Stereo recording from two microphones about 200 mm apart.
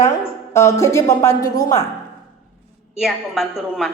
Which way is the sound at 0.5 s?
15° left (ahead or behind).